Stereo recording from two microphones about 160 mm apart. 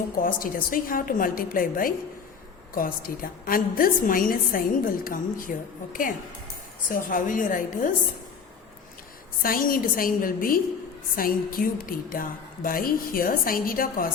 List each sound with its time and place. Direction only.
0.2 s a woman's voice: 60° left (ahead or behind)
9.4 s a woman's voice: 60° left (ahead or behind)